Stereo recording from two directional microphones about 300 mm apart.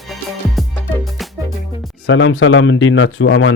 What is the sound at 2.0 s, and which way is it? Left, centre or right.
Speech, left.